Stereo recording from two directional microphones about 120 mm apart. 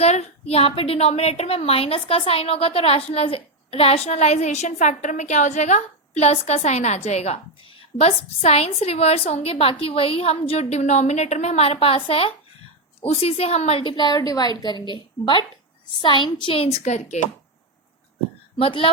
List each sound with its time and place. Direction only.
0.0 s a woman's voice: 65° left (ahead or behind); by 16.6 s 45° left (ahead or behind)
16.8 s speech: 70° left (ahead or behind)
18.6 s a woman's voice: 50° left (ahead or behind)